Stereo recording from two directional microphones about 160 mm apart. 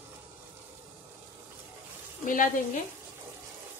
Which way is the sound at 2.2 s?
55° left (ahead or behind).